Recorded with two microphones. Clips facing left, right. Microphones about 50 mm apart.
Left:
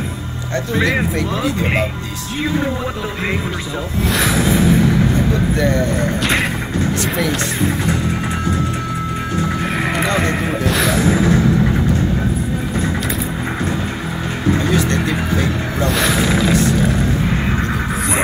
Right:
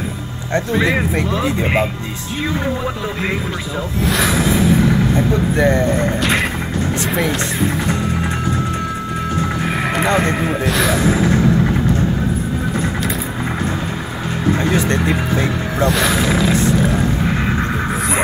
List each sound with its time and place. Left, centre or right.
4.0 s speech: centre
5.6 s speech: right
7.1 s speech: centre
9.6 s neigh: centre
10.1 s speech: centre
14.6 s speech: centre
15.8 s speech: centre